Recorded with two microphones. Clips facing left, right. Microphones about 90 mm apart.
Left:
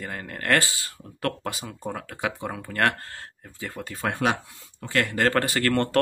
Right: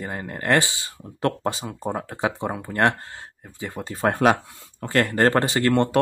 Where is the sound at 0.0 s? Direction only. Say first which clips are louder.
Right 3 dB; 20° right (ahead or behind).